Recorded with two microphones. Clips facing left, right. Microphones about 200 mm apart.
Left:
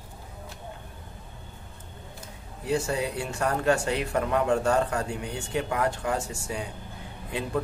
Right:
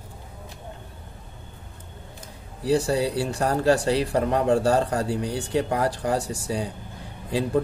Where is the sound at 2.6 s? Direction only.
35° right (ahead or behind).